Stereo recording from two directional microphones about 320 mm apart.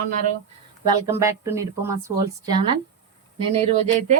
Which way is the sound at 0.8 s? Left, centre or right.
Centre.